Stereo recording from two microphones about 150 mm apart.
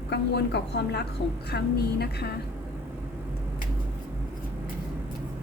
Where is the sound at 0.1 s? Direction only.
90° left.